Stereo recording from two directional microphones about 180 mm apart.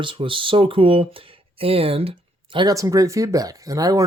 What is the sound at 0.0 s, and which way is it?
Speech, 30° right (ahead or behind).